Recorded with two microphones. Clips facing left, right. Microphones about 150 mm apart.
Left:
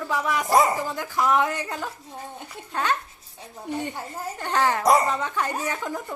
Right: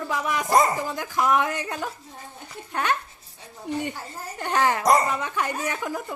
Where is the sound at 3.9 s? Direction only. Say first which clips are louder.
Left 4 dB; 20° left (ahead or behind).